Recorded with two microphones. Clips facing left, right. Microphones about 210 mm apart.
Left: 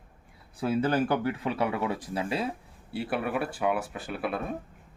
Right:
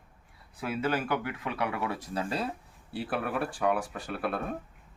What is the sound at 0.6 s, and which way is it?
Speech, 35° left (ahead or behind).